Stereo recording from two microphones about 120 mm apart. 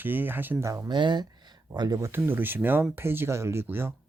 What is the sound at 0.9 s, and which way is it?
Speech, 40° right (ahead or behind).